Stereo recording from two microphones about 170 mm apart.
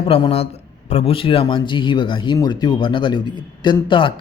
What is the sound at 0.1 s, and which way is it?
Speech, 35° left (ahead or behind).